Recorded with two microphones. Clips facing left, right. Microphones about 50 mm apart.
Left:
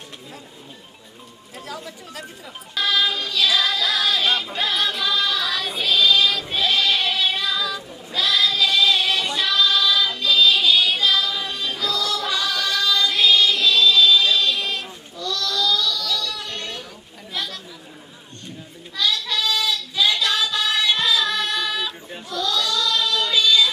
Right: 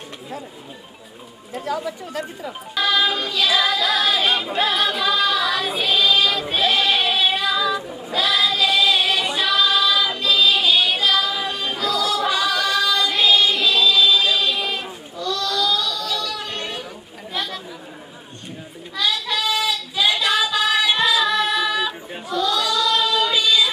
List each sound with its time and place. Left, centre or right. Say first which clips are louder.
1.5 s speech: right 9 dB; right
2.7 s female singing: right 2 dB; centre
8.3 s singing: even; centre
17.3 s chatter: right 2 dB; centre
18.9 s child singing: right 1 dB; centre